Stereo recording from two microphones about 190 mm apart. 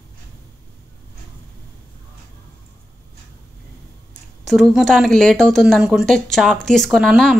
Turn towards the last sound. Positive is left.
turn(degrees=0)  # may be behind; listen again after turning